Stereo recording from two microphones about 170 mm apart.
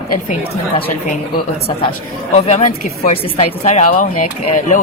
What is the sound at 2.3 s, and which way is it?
Speech, 45° left (ahead or behind).